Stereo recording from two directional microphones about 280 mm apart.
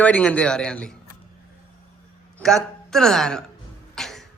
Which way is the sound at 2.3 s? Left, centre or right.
Centre.